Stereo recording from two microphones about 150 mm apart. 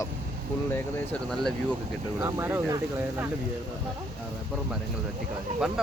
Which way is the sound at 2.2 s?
15° right (ahead or behind).